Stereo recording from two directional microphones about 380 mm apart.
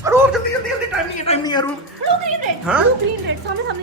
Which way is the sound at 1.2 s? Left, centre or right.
Centre.